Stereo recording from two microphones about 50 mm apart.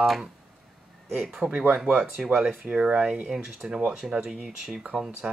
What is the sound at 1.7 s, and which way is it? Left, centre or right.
Speech, centre.